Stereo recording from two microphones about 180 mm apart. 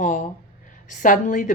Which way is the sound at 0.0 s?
45° left (ahead or behind).